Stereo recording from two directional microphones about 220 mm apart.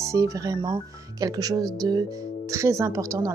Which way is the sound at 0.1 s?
15° right (ahead or behind).